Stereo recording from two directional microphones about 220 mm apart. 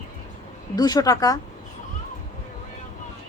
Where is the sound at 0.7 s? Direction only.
20° left (ahead or behind).